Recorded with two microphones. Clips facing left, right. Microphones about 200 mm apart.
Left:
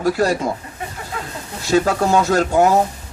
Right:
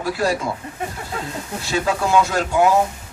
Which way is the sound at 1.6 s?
40° left (ahead or behind).